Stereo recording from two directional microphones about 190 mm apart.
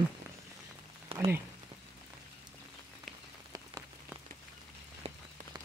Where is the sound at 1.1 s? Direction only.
15° right (ahead or behind).